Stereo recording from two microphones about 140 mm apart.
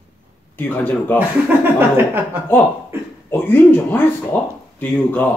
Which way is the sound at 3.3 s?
15° left (ahead or behind).